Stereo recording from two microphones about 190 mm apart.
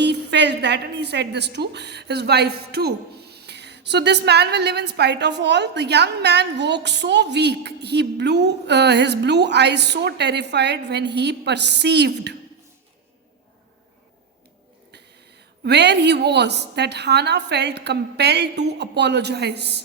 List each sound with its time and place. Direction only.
0.0 s a woman's voice: 65° right (ahead or behind)
15.6 s a woman's voice: 60° right (ahead or behind)